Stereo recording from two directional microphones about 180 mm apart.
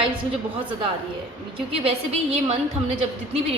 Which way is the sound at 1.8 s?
35° right (ahead or behind).